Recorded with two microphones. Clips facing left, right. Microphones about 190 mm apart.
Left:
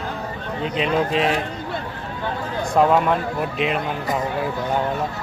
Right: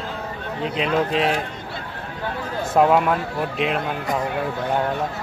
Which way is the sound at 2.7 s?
5° right (ahead or behind).